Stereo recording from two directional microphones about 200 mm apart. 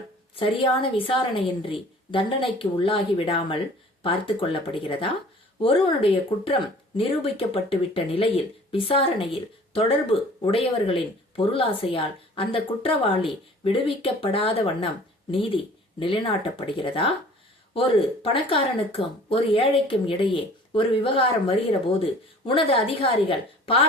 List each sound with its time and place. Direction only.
0.3 s speech: 25° left (ahead or behind)